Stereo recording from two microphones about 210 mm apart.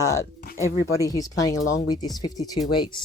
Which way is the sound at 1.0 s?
15° left (ahead or behind).